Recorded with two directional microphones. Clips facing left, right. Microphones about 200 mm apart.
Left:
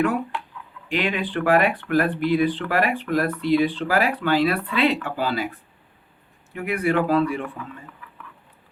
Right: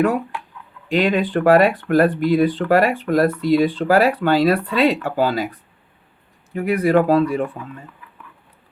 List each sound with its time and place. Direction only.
1.0 s speech: 45° right (ahead or behind)